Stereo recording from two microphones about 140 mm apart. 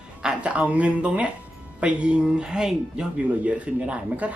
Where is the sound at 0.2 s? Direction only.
5° right (ahead or behind).